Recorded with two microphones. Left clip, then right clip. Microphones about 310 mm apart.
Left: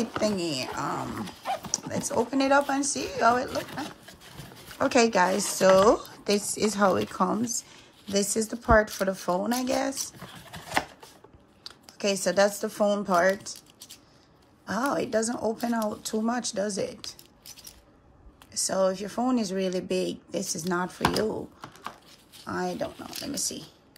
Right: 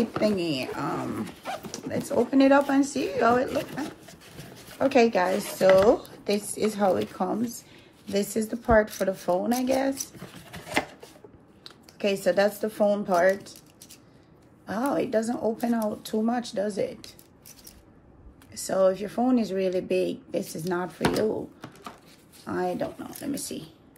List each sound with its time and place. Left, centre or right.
0.0 s speech: centre
4.7 s speech: left
14.7 s speech: left
18.5 s speech: left
22.4 s speech: centre